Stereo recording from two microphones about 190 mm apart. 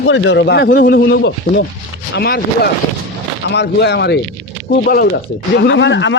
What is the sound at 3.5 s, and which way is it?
Speech, 65° left (ahead or behind).